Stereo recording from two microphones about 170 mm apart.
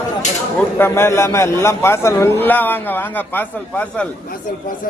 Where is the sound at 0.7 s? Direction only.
15° left (ahead or behind).